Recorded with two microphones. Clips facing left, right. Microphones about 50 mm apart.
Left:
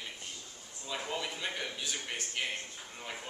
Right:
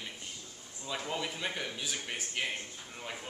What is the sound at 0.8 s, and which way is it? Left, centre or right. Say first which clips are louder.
A man's voice: right 1 dB; centre.